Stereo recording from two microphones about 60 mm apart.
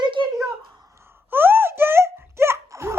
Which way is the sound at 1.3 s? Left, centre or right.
Right.